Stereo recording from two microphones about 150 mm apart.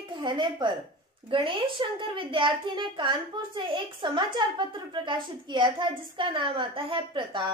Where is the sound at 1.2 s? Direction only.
35° right (ahead or behind).